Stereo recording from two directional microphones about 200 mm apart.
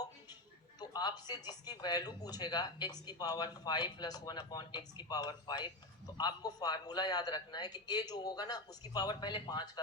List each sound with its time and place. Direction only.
0.8 s speech: 20° left (ahead or behind)